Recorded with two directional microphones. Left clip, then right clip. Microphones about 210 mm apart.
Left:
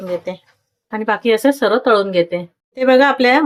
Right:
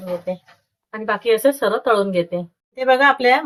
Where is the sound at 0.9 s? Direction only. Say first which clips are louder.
Left 3 dB; 35° left (ahead or behind).